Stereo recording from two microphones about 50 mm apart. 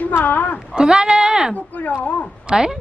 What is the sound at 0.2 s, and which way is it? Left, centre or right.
Speech, left.